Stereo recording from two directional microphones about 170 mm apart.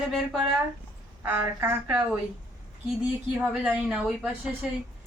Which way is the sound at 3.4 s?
5° right (ahead or behind).